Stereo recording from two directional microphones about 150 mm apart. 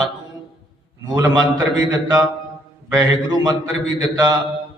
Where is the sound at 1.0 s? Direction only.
25° right (ahead or behind).